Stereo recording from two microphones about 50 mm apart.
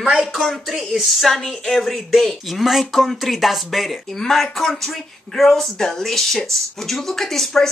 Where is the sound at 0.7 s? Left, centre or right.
Centre.